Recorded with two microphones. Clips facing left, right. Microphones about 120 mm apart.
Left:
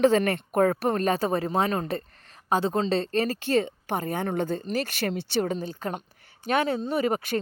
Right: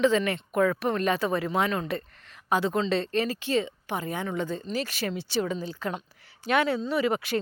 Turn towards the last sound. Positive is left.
turn(degrees=45)  # may be behind; listen again after turning